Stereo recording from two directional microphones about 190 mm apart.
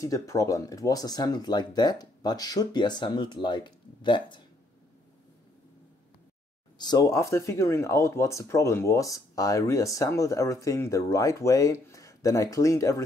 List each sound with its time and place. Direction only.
0.0 s speech: 15° left (ahead or behind)
6.8 s speech: 20° left (ahead or behind)